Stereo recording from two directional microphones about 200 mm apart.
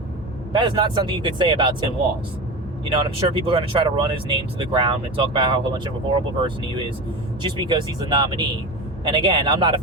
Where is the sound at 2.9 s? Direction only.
25° right (ahead or behind).